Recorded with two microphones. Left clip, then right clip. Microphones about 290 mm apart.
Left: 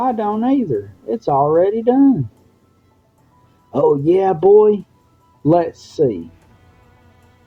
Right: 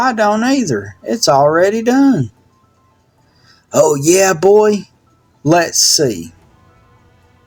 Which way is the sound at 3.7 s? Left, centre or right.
Right.